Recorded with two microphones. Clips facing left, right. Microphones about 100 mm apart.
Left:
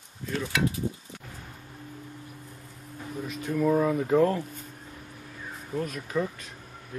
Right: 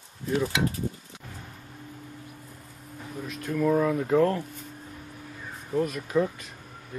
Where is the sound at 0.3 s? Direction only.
15° right (ahead or behind).